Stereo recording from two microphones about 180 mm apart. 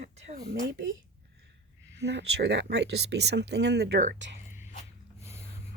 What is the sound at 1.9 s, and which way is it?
Speech, 75° right (ahead or behind).